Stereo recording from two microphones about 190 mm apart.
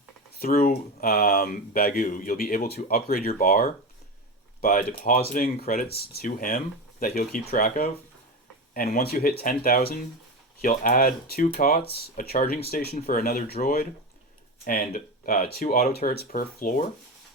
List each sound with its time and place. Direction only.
0.3 s speech: 50° left (ahead or behind)